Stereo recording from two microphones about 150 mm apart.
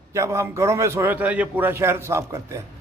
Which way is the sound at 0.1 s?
20° right (ahead or behind).